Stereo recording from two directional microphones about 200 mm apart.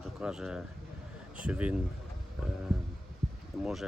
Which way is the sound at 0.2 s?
5° right (ahead or behind).